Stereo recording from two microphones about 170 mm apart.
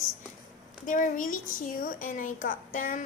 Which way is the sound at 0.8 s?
50° left (ahead or behind).